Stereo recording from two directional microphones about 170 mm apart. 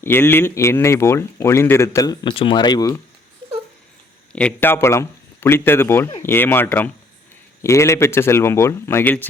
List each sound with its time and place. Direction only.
0.0 s speech: 10° left (ahead or behind)
4.3 s speech: 5° left (ahead or behind)